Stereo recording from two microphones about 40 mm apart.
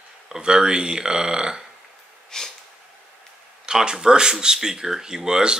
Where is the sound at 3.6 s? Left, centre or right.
Centre.